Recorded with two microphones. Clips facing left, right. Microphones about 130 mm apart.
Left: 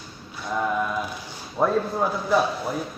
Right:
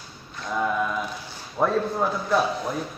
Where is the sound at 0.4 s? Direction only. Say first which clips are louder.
Even; 5° left (ahead or behind).